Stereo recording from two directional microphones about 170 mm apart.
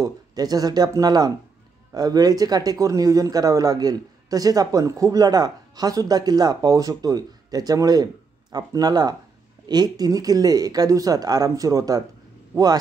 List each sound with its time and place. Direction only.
0.0 s speech: 20° right (ahead or behind)